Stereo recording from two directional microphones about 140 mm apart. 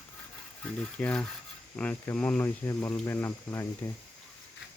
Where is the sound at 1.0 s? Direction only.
10° left (ahead or behind).